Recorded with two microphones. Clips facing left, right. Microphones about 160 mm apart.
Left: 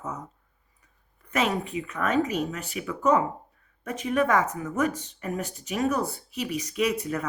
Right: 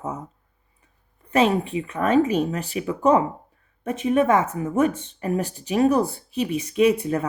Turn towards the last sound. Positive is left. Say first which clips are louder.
# right 7 dB
turn(degrees=-30)  # may be behind; listen again after turning